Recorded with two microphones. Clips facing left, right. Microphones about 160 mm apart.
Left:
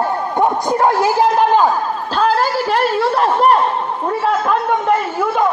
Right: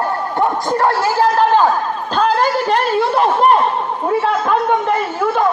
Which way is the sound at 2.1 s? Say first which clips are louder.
Right 1 dB; 5° left (ahead or behind).